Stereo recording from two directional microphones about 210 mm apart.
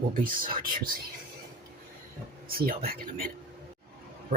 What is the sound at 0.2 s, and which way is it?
Speech, 40° right (ahead or behind).